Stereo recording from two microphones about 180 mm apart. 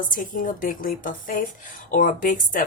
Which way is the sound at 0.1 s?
45° left (ahead or behind).